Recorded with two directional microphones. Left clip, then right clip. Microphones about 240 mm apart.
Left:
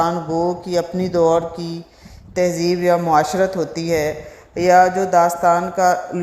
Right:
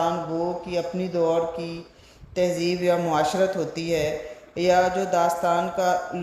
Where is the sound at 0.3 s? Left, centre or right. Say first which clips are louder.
Left 7 dB; left.